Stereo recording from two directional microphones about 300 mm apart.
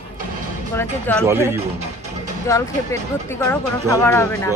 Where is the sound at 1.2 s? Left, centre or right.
Centre.